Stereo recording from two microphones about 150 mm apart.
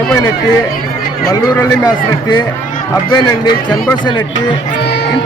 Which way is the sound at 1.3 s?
25° left (ahead or behind).